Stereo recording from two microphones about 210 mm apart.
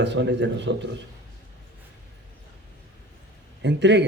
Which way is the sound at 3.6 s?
55° right (ahead or behind).